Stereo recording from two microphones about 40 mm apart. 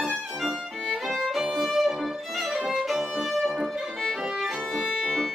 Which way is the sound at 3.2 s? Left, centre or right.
Centre.